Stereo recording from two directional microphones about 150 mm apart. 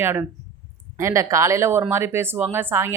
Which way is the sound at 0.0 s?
15° right (ahead or behind).